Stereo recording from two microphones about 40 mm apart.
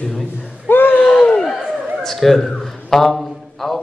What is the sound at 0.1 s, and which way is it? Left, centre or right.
Speech, centre.